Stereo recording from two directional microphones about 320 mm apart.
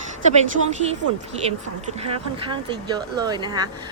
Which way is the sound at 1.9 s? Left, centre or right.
Centre.